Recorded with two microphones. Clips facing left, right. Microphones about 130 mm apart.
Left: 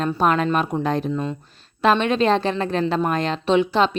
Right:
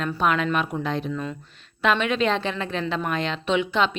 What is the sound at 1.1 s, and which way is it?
A woman's voice, 30° left (ahead or behind).